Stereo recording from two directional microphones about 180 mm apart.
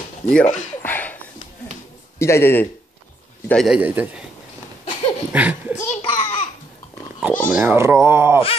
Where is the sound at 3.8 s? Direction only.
10° right (ahead or behind).